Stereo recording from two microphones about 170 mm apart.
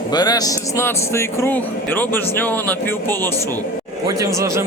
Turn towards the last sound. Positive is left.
turn(degrees=-15)  # may be behind; listen again after turning